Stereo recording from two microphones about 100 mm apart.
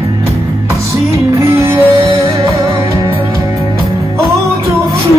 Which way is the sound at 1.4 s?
25° right (ahead or behind).